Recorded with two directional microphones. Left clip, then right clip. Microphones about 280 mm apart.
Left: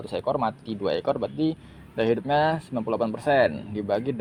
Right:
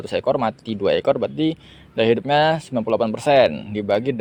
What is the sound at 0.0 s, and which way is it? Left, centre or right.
Speech, right.